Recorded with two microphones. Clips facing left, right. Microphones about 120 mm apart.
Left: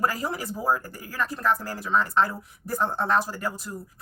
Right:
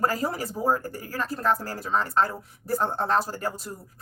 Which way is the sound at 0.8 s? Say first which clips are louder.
Even; 35° right (ahead or behind).